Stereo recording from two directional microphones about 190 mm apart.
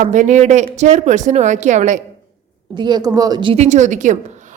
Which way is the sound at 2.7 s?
25° right (ahead or behind).